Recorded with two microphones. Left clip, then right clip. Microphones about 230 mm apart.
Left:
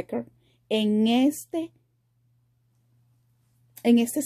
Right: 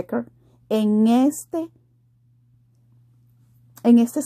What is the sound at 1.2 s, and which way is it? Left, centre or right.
Speech, centre.